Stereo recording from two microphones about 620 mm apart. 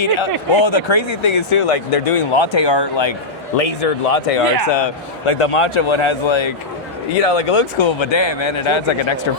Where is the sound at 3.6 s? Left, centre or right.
Left.